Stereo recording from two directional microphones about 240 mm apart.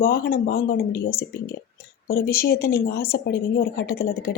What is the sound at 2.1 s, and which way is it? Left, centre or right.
Speech, left.